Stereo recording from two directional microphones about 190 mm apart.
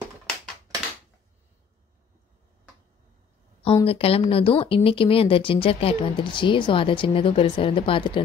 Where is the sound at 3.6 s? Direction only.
30° left (ahead or behind).